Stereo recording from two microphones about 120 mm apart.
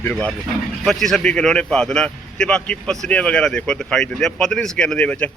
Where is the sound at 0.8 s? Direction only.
5° left (ahead or behind).